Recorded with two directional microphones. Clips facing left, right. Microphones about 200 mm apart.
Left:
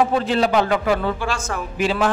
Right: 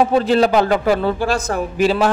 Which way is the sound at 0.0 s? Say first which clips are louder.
Right 4 dB; 35° right (ahead or behind).